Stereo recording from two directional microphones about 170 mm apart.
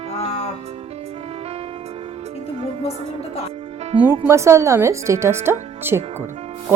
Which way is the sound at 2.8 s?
35° left (ahead or behind).